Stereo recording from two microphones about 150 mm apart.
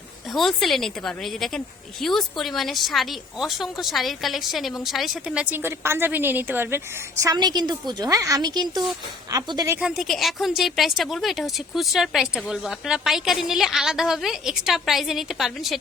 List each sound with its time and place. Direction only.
0.3 s a woman's voice: centre (ahead or behind); by 9.7 s 25° right (ahead or behind)
9.8 s a woman's voice: centre (ahead or behind)